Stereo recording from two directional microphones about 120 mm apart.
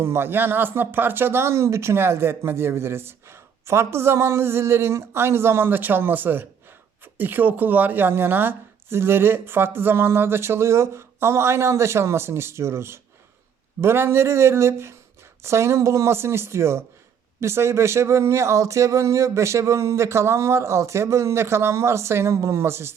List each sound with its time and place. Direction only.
0.0 s speech: 20° right (ahead or behind)